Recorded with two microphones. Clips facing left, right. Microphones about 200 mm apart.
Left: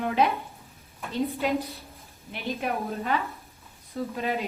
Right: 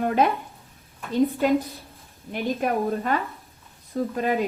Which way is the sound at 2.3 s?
45° right (ahead or behind).